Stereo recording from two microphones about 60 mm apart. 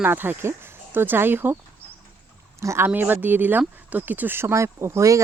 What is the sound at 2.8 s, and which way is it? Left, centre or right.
Speech, right.